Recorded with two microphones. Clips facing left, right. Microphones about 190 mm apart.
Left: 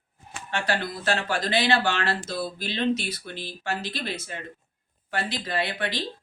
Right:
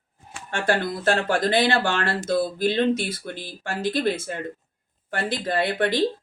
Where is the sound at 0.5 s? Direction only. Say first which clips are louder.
Right 5 dB; 50° right (ahead or behind).